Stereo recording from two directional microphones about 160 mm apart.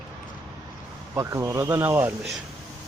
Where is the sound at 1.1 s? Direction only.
20° right (ahead or behind).